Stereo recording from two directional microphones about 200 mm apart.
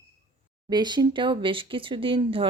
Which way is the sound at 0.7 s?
20° right (ahead or behind).